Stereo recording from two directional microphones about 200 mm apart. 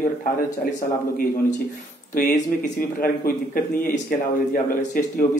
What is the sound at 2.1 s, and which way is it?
A man's voice, 45° left (ahead or behind).